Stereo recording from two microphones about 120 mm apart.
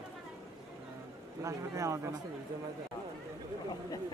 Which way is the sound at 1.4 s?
25° right (ahead or behind).